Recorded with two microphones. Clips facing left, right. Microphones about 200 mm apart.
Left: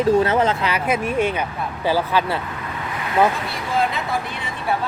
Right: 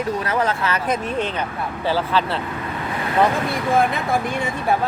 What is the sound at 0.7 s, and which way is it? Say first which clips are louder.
Speech: left 2 dB; 10° left (ahead or behind).